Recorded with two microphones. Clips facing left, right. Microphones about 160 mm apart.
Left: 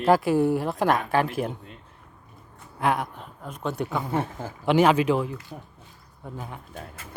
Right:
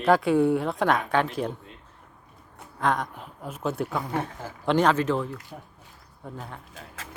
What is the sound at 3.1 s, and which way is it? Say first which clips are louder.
Speech: right 1 dB; 5° right (ahead or behind).